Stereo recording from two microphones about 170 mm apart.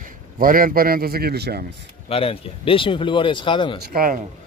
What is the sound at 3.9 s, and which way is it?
Speech, 55° right (ahead or behind).